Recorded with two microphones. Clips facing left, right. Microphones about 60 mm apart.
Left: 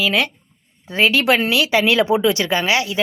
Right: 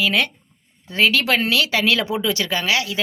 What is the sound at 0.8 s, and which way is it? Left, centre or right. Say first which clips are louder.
Speech: left 3 dB; centre.